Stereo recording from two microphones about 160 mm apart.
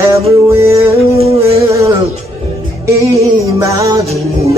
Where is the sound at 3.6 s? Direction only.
20° right (ahead or behind).